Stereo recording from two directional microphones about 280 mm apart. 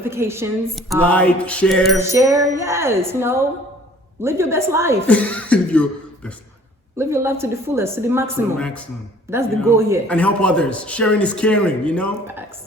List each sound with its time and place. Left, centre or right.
0.0 s a man's voice: centre
2.0 s speech: centre
5.0 s a man's voice: centre
6.9 s speech: centre
8.5 s a man's voice: centre
9.3 s speech: centre
10.1 s a man's voice: centre
12.2 s speech: centre